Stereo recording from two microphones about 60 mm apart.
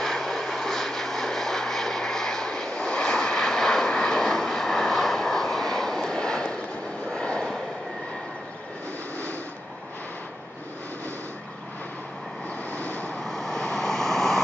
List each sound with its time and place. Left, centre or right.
0.0 s vehicle: centre
12.7 s vehicle: left
13.2 s vehicle: centre